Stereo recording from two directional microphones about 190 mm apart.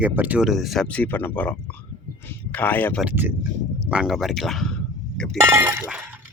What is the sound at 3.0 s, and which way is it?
Breaking, 10° right (ahead or behind).